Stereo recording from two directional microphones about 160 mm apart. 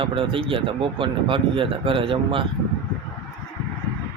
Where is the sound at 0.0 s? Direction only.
35° right (ahead or behind).